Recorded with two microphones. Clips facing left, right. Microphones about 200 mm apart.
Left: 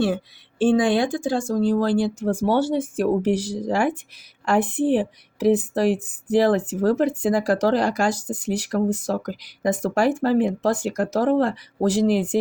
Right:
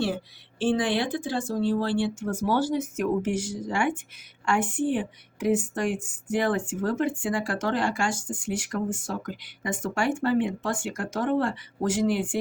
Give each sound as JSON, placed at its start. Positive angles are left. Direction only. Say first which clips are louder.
{"t": 0.6, "sound": "a woman's voice", "louder": "left 6 dB", "side_deg": 50}